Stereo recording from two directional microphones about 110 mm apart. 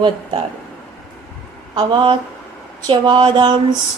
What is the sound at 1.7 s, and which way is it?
Speech, 50° right (ahead or behind).